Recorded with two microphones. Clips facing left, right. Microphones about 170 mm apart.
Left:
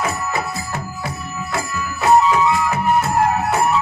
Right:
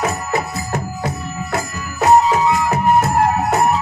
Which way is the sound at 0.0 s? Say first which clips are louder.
Right 2 dB; 40° right (ahead or behind).